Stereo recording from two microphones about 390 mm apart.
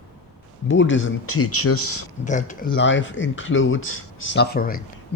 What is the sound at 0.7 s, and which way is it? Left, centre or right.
Speech, left.